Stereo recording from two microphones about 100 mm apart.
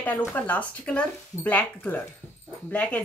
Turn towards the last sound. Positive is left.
turn(degrees=15)  # may be behind; listen again after turning